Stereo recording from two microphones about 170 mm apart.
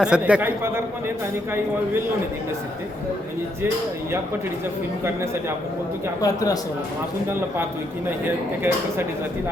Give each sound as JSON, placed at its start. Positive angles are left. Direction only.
{"t": 0.0, "sound": "speech", "side_deg": -5}
{"t": 6.2, "sound": "speech", "side_deg": 20}
{"t": 7.3, "sound": "speech", "side_deg": -15}